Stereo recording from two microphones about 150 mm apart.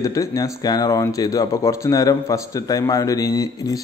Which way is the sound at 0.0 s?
20° left (ahead or behind).